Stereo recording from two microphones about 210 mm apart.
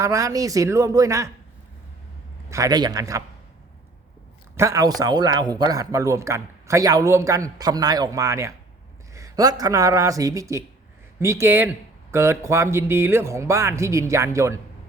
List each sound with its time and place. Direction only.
0.0 s a man's voice: 15° right (ahead or behind)
2.5 s a man's voice: 15° right (ahead or behind)
4.5 s a man's voice: 15° right (ahead or behind)